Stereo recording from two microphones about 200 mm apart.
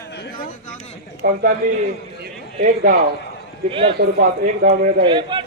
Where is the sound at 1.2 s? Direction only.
50° right (ahead or behind).